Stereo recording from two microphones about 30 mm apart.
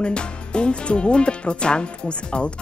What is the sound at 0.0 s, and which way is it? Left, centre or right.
A woman's voice, left.